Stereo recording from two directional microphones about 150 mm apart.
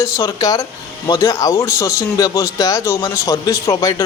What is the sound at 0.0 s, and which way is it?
A man's voice, 20° left (ahead or behind).